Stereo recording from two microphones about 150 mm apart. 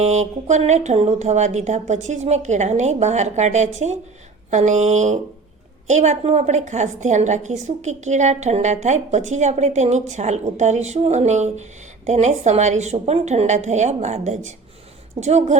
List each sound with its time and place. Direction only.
0.0 s a woman's voice: 50° right (ahead or behind)